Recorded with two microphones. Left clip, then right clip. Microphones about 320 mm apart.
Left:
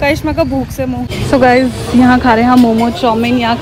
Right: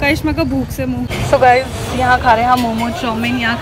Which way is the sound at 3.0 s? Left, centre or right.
Left.